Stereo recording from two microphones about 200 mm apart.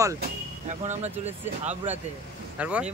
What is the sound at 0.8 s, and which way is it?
Speech, 35° right (ahead or behind).